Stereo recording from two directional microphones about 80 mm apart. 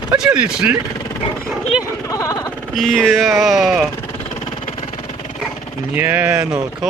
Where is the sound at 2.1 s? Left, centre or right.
Left.